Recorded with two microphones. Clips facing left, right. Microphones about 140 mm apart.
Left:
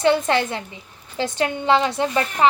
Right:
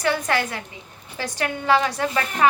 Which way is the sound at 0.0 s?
25° left (ahead or behind).